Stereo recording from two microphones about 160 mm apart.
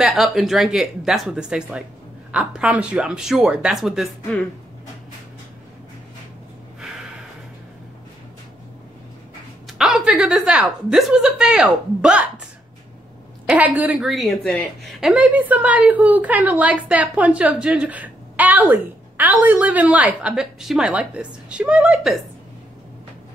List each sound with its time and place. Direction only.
0.0 s a woman's voice: centre (ahead or behind)
9.7 s a woman's voice: centre (ahead or behind)
13.5 s a woman's voice: 10° right (ahead or behind)